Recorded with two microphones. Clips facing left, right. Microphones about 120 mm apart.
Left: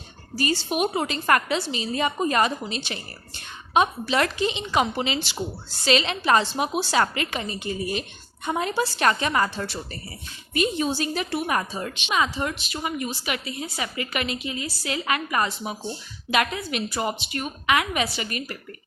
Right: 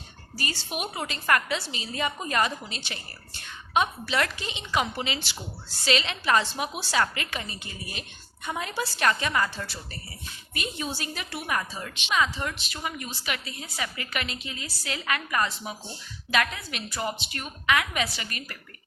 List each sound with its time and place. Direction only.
0.3 s a woman's voice: 25° left (ahead or behind)
12.0 s a woman's voice: 15° left (ahead or behind)